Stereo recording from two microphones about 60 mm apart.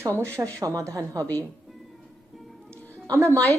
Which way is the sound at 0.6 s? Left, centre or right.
Right.